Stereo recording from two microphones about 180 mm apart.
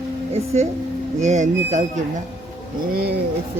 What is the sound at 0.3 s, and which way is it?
Speech, 35° right (ahead or behind).